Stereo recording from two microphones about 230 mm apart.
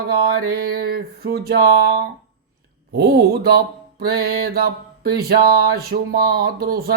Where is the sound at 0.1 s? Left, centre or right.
Right.